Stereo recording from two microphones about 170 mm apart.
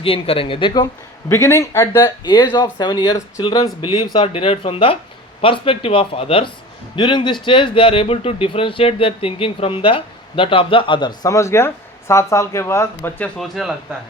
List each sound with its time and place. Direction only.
0.0 s speech: 35° left (ahead or behind)
1.3 s speech: 15° left (ahead or behind); by 13.7 s centre (ahead or behind)